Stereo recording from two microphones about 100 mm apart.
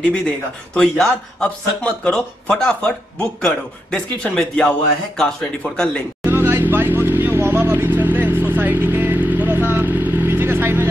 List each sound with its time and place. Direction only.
0.7 s speech: 5° left (ahead or behind)
6.2 s vehicle: 20° right (ahead or behind)